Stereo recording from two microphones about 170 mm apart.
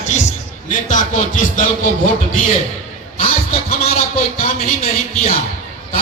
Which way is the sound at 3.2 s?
35° left (ahead or behind).